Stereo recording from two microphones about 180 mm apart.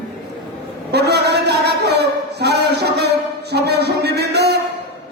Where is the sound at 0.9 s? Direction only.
70° right (ahead or behind).